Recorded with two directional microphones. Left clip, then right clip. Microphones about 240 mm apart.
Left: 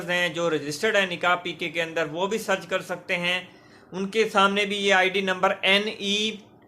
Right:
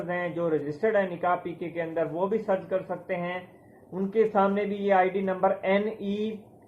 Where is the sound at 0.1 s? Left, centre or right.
Centre.